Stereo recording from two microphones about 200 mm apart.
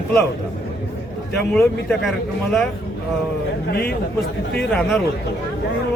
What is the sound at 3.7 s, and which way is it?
Speech, 50° left (ahead or behind).